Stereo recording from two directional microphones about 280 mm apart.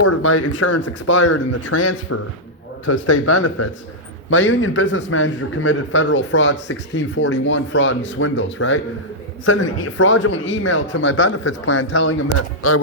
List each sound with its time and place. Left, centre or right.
0.0 s a man's voice: left